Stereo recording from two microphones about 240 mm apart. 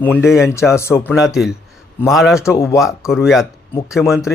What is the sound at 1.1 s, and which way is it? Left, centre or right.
Speech, centre.